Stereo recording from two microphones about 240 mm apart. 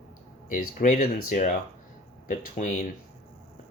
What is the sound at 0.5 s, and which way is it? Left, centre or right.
Speech, left.